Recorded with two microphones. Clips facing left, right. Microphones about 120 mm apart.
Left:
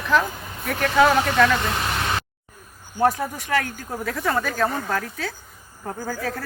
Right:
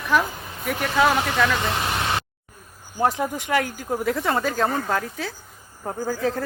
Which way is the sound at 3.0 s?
20° right (ahead or behind).